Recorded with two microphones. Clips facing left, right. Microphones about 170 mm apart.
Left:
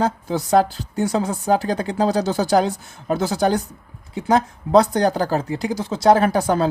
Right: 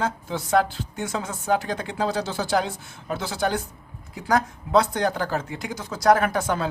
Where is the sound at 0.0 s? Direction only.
35° left (ahead or behind).